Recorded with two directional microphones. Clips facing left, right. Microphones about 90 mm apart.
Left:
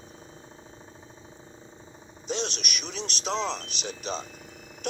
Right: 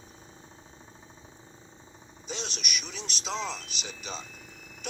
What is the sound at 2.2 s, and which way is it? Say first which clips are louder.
Speech: left 6 dB; 65° left (ahead or behind).